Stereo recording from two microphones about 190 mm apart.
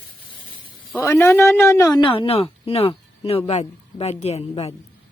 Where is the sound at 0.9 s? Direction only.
10° left (ahead or behind); by 4.7 s 35° left (ahead or behind).